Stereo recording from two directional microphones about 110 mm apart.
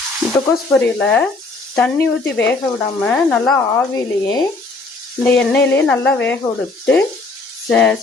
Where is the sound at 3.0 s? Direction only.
10° left (ahead or behind).